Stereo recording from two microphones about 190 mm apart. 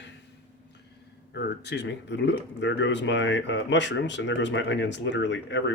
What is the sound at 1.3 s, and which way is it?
Speech, 60° left (ahead or behind).